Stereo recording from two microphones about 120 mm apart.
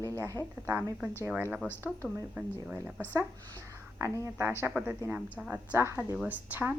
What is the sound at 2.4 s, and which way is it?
Speech, 15° right (ahead or behind).